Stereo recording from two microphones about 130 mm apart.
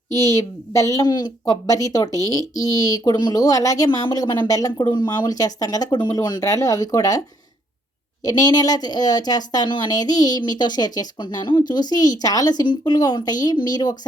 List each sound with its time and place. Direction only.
0.1 s a woman's voice: 25° left (ahead or behind)
8.2 s a woman's voice: 30° left (ahead or behind)